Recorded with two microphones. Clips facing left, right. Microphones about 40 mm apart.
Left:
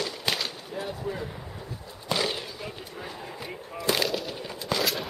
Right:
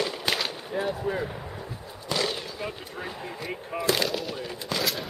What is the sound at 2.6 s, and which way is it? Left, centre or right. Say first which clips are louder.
Speech: right 3 dB; centre.